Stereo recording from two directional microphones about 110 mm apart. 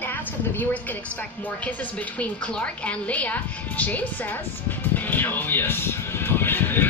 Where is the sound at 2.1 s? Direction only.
10° left (ahead or behind).